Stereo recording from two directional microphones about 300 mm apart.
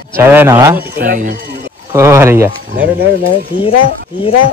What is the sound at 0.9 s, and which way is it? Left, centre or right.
Speech, right.